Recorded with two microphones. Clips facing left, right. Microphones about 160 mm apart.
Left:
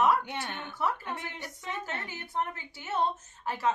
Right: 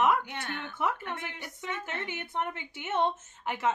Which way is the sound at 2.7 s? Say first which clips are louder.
Right 2 dB; 20° right (ahead or behind).